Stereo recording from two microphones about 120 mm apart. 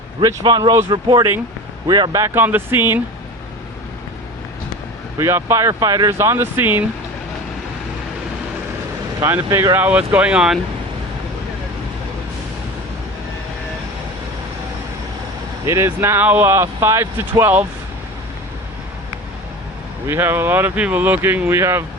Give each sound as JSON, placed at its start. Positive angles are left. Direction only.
{"t": 0.2, "sound": "speech", "side_deg": -25}
{"t": 0.4, "sound": "speech", "side_deg": -40}
{"t": 2.2, "sound": "speech", "side_deg": -15}
{"t": 5.1, "sound": "speech", "side_deg": -25}
{"t": 9.2, "sound": "speech", "side_deg": -20}
{"t": 15.6, "sound": "speech", "side_deg": -20}
{"t": 20.1, "sound": "speech", "side_deg": -15}